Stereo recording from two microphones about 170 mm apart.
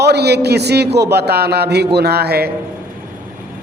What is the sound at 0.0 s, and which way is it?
A man's voice, 75° right (ahead or behind).